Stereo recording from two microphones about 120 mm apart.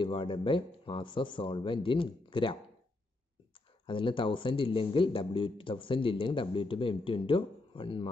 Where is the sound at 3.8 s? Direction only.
45° left (ahead or behind).